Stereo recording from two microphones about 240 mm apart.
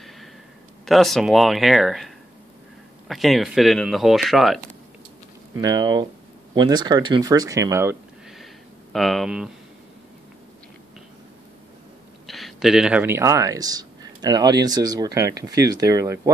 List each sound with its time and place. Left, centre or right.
0.8 s speech: centre
5.6 s speech: centre
12.3 s speech: centre